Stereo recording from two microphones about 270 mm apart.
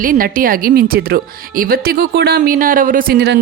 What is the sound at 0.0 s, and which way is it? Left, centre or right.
Speech, right.